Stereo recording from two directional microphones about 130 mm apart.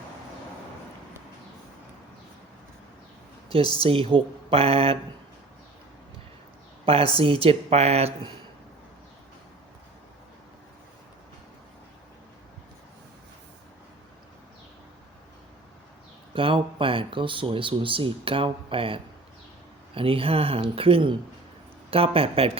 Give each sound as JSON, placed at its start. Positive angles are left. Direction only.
{"t": 3.8, "sound": "speech", "side_deg": -45}
{"t": 6.8, "sound": "speech", "side_deg": -45}
{"t": 16.3, "sound": "speech", "side_deg": -40}